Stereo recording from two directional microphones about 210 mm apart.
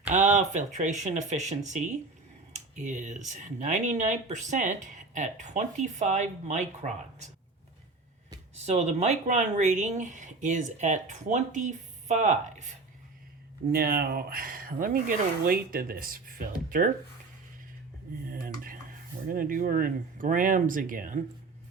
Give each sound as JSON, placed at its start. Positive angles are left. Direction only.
{"t": 0.1, "sound": "speech", "side_deg": -35}
{"t": 2.5, "sound": "a sound", "side_deg": -35}
{"t": 3.2, "sound": "speech", "side_deg": -35}
{"t": 8.6, "sound": "speech", "side_deg": -30}
{"t": 13.7, "sound": "speech", "side_deg": -45}
{"t": 18.3, "sound": "dishes", "side_deg": -45}
{"t": 19.3, "sound": "speech", "side_deg": -40}